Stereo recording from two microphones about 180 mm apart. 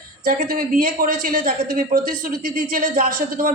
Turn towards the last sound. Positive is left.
turn(degrees=-45)  # may be behind; listen again after turning